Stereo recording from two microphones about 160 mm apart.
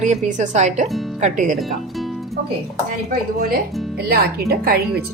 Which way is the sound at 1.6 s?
Centre (ahead or behind).